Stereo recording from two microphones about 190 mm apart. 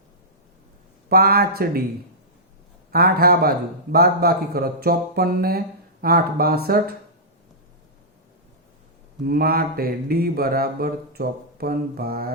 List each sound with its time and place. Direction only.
1.1 s mantra: 50° right (ahead or behind)
2.9 s mantra: 55° right (ahead or behind)
9.2 s mantra: 55° right (ahead or behind)